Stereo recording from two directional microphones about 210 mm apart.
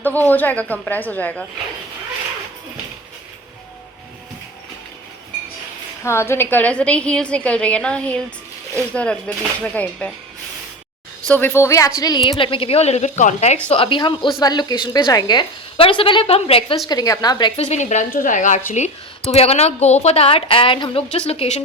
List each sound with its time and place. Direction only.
0.0 s a woman's voice: 10° left (ahead or behind)
6.0 s a woman's voice: 10° left (ahead or behind)
11.3 s a woman's voice: 10° left (ahead or behind)
17.6 s a woman's voice: 35° left (ahead or behind)